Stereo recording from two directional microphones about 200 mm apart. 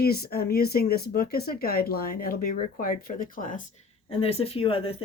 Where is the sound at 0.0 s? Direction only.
50° left (ahead or behind).